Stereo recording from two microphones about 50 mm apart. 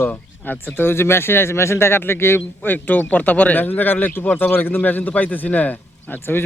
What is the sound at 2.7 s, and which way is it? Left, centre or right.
Speech, left.